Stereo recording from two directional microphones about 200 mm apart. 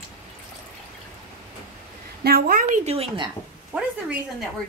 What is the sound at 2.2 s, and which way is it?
Speech, 50° right (ahead or behind).